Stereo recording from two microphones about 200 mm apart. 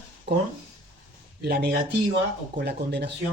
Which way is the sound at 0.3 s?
55° right (ahead or behind).